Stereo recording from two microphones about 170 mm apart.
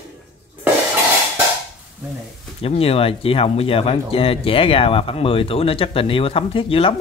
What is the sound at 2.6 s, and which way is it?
Speech, 35° left (ahead or behind).